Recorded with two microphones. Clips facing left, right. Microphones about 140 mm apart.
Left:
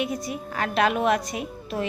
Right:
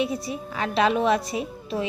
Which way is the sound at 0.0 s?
30° right (ahead or behind).